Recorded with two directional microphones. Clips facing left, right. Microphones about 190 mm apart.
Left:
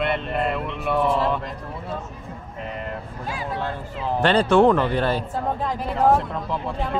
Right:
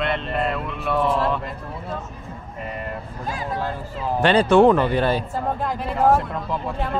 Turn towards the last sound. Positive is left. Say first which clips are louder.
# even
turn(degrees=0)  # may be behind; listen again after turning